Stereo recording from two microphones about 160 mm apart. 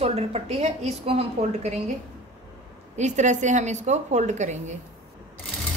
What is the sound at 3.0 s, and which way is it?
A woman's voice, 50° right (ahead or behind).